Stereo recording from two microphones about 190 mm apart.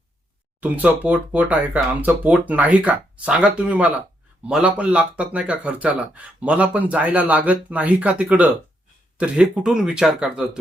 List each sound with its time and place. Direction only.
0.6 s speech: 10° right (ahead or behind)